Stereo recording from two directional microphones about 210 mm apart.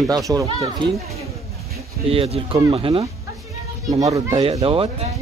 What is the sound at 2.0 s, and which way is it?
Speech, 25° right (ahead or behind).